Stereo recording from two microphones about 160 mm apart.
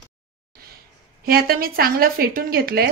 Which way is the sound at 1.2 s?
70° right (ahead or behind).